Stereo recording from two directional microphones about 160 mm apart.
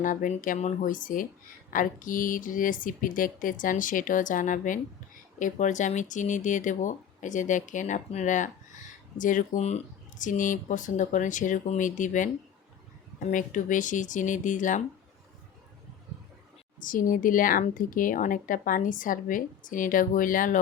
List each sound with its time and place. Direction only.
0.0 s speech: 55° left (ahead or behind)
16.8 s speech: 55° left (ahead or behind)